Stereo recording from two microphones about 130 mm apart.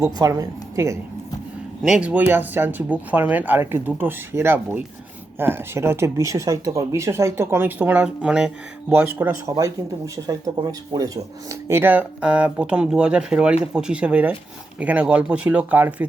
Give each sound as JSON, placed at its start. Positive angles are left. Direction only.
{"t": 0.0, "sound": "speech", "side_deg": -25}
{"t": 1.8, "sound": "speech", "side_deg": -5}